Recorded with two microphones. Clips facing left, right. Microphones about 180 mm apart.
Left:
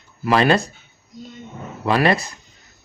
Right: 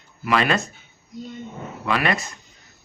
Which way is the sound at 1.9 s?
35° left (ahead or behind).